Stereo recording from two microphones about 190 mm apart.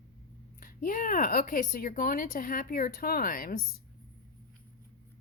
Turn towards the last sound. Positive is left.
turn(degrees=50)  # may be behind; listen again after turning